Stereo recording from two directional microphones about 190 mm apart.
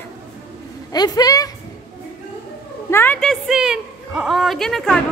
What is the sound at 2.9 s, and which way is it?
Speech, 10° left (ahead or behind).